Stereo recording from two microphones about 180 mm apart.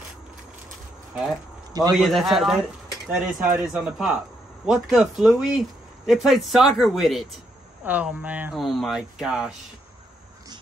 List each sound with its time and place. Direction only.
1.7 s a man's voice: 20° right (ahead or behind)
2.0 s speech: centre (ahead or behind)